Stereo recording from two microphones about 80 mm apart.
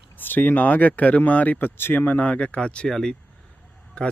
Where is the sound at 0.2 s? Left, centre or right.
Left.